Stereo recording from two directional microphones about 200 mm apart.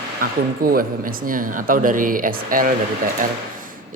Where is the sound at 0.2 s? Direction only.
45° right (ahead or behind).